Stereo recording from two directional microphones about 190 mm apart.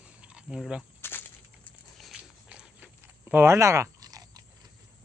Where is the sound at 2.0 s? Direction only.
5° right (ahead or behind); by 4.4 s 20° right (ahead or behind).